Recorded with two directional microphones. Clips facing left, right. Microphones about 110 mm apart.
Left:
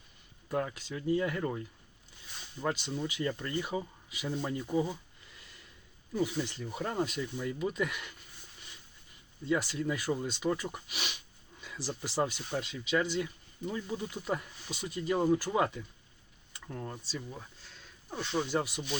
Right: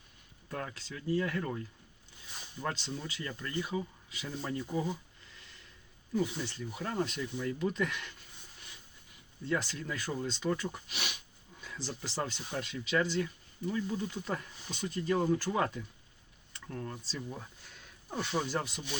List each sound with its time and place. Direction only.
0.4 s speech: 15° left (ahead or behind)
4.1 s speech: 10° left (ahead or behind)
6.1 s speech: 15° left (ahead or behind)
7.0 s speech: 10° left (ahead or behind)
9.5 s speech: 10° left (ahead or behind)
13.0 s speech: 15° left (ahead or behind)
16.5 s a sound: 15° left (ahead or behind)
18.1 s speech: 10° right (ahead or behind)